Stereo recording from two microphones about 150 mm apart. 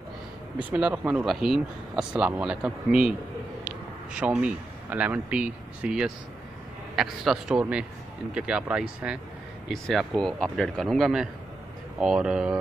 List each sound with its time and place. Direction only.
0.7 s speech: 10° right (ahead or behind)
4.4 s speech: 10° right (ahead or behind)